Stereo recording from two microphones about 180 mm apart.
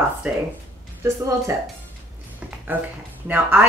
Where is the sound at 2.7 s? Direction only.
10° right (ahead or behind).